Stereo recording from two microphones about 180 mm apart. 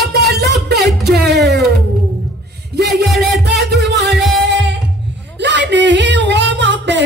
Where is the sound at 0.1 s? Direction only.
70° right (ahead or behind).